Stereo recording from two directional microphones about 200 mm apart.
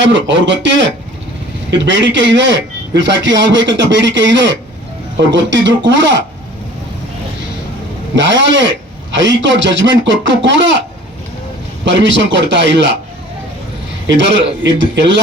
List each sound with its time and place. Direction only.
0.0 s speech: 65° right (ahead or behind)
8.1 s speech: 65° right (ahead or behind)
11.9 s speech: 65° right (ahead or behind)
14.1 s speech: 65° right (ahead or behind)